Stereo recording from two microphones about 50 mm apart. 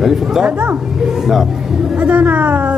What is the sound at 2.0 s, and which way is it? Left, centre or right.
Speech, right.